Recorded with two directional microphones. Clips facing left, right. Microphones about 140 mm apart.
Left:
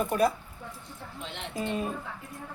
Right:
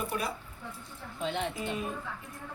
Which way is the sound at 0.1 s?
45° left (ahead or behind).